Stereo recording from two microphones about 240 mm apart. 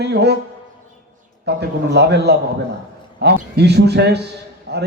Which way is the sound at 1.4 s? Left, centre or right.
Right.